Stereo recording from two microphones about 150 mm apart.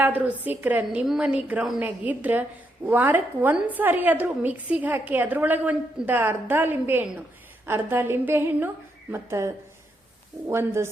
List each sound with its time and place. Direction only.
0.0 s a woman's voice: 10° right (ahead or behind)